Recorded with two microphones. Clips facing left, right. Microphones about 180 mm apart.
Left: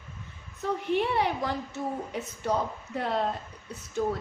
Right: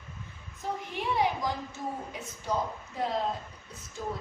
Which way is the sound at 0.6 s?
65° left (ahead or behind).